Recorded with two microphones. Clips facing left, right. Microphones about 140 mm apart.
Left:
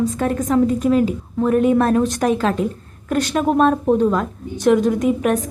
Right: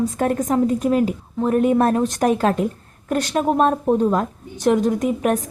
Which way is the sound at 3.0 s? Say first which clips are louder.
Left 1 dB; 30° right (ahead or behind).